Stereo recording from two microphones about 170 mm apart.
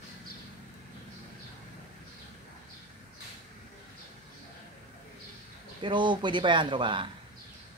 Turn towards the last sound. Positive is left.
turn(degrees=-30)  # may be behind; listen again after turning